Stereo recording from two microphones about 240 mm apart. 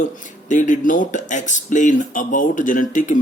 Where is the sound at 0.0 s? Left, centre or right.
Left.